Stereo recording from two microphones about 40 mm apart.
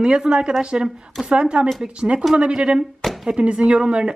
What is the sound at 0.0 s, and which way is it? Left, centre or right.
Speech, right.